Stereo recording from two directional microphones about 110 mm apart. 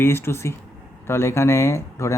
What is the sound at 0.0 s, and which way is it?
Speech, 25° left (ahead or behind).